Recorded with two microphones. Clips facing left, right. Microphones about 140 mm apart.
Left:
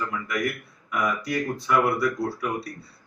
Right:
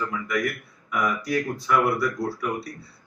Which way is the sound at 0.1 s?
Centre (ahead or behind).